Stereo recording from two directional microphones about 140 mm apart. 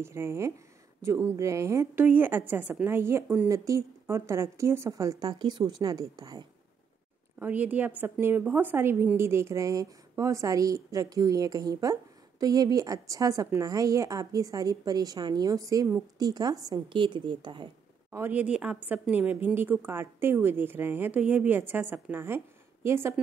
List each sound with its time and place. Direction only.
0.0 s a woman's voice: 20° right (ahead or behind)
7.3 s a woman's voice: 10° right (ahead or behind); by 17.6 s 35° right (ahead or behind)
18.1 s a woman's voice: 15° right (ahead or behind)